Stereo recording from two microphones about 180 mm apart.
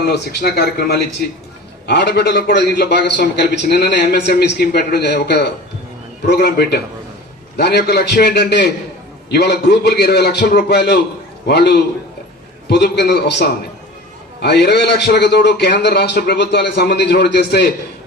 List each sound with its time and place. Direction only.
0.1 s a man's voice: 60° left (ahead or behind)